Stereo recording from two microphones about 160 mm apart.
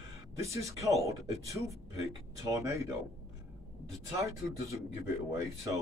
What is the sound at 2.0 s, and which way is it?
Speech, 20° right (ahead or behind).